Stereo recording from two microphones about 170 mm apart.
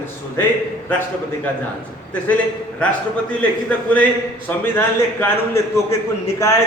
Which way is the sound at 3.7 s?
10° left (ahead or behind).